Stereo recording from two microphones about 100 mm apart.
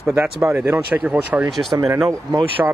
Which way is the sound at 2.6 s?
15° right (ahead or behind).